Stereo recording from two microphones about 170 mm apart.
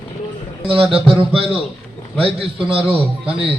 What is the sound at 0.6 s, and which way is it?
Speech, 35° right (ahead or behind).